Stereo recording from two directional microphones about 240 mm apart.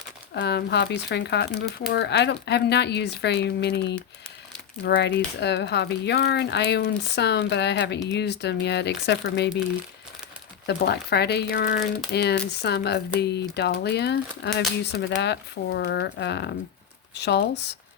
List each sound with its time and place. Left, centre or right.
0.3 s speech: left
10.7 s speech: left